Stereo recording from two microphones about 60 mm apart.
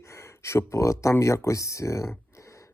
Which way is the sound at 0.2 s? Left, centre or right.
Left.